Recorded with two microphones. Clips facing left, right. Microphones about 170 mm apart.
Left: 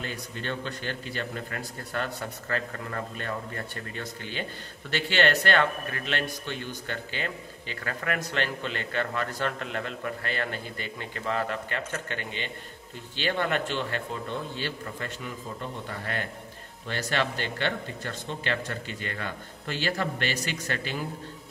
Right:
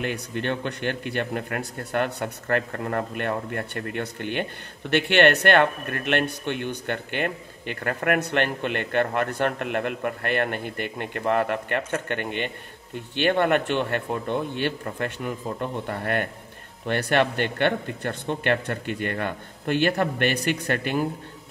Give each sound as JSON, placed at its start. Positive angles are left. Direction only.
{"t": 0.0, "sound": "speech", "side_deg": -60}